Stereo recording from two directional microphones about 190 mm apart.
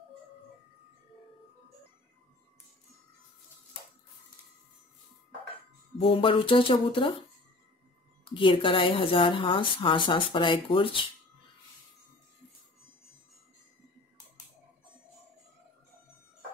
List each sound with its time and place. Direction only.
5.9 s a woman's voice: 30° left (ahead or behind)
8.3 s a woman's voice: 25° left (ahead or behind)